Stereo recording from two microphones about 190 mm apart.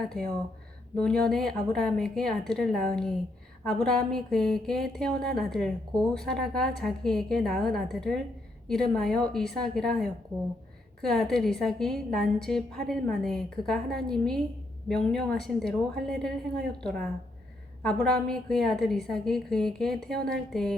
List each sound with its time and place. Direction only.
0.0 s a woman's voice: 5° left (ahead or behind)